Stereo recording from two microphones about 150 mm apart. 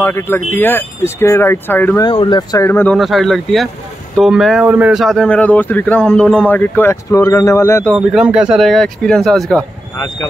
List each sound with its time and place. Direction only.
0.0 s speech: 15° left (ahead or behind)
2.0 s speech: 30° left (ahead or behind)
2.6 s speech: 15° left (ahead or behind)
2.9 s speech: centre (ahead or behind); by 7.9 s 20° left (ahead or behind)
8.1 s speech: 5° right (ahead or behind)
9.9 s speech: 25° left (ahead or behind)